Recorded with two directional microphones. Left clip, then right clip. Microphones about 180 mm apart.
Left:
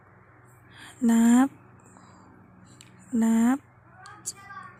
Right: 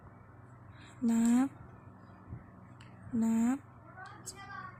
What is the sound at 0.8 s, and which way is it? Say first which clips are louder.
Speech: left 9 dB; 50° left (ahead or behind).